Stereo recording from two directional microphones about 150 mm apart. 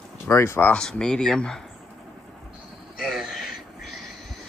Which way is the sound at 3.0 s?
Centre (ahead or behind).